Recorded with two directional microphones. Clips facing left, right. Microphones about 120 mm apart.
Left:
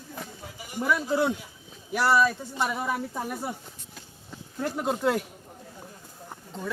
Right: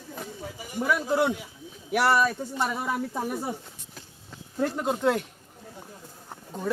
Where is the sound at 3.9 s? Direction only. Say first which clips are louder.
Left 1 dB; 5° left (ahead or behind).